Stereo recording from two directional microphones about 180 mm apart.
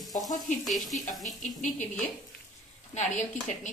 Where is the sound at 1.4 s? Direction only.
45° left (ahead or behind).